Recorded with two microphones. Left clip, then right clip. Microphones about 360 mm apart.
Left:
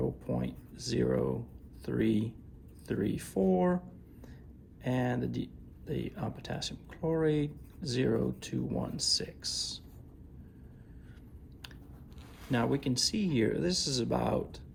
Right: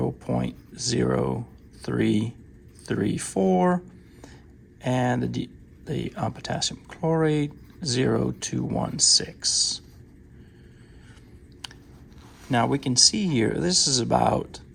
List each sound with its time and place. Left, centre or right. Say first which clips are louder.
0.0 s a sound: right 7 dB; right
1.8 s speech: right 6 dB; right
4.8 s speech: right 8 dB; right
11.6 s chewing: right 10 dB; right
12.5 s speech: right 8 dB; centre